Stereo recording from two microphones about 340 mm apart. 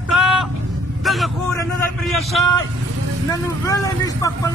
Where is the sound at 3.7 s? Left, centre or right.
Centre.